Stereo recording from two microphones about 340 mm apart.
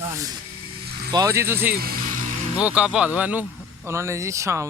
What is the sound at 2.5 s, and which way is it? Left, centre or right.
Speech, centre.